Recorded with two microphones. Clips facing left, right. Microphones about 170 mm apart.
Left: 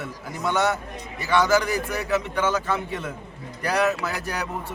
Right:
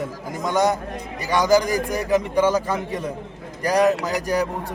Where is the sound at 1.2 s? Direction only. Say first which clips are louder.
Right 3 dB; 40° right (ahead or behind).